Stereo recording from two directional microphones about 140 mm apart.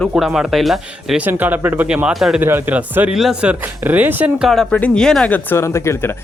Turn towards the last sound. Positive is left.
turn(degrees=20)  # may be behind; listen again after turning